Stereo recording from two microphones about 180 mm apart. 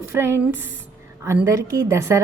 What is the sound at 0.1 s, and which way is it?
A woman's voice, 15° right (ahead or behind).